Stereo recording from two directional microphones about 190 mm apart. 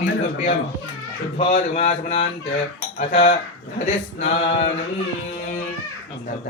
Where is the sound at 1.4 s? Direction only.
40° left (ahead or behind).